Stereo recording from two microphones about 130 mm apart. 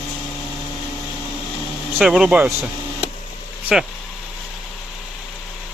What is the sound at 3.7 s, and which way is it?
Speech, 5° right (ahead or behind).